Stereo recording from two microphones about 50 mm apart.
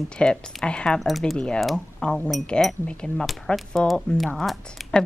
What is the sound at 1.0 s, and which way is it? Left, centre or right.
Speech, centre.